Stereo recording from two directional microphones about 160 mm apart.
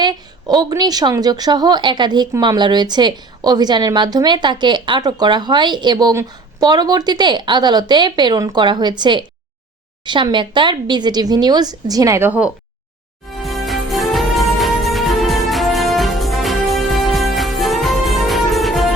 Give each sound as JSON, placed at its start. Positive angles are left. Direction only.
{"t": 0.0, "sound": "a woman's voice", "side_deg": -25}
{"t": 13.4, "sound": "music", "side_deg": 0}